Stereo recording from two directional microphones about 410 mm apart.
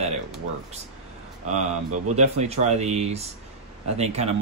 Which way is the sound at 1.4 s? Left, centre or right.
Centre.